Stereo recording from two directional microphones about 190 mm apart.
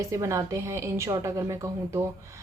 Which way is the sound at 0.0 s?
15° right (ahead or behind).